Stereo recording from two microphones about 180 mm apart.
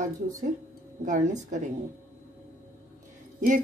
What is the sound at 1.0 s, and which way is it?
Speech, 45° right (ahead or behind).